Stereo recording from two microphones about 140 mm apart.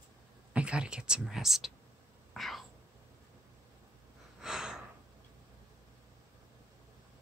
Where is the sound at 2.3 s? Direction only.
Centre (ahead or behind).